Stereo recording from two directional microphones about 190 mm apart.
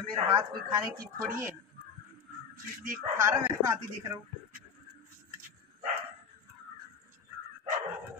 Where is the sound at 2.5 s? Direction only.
45° right (ahead or behind).